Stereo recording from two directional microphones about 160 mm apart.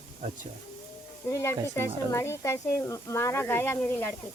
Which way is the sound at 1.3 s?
15° left (ahead or behind).